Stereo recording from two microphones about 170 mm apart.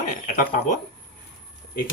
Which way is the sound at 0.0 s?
50° left (ahead or behind).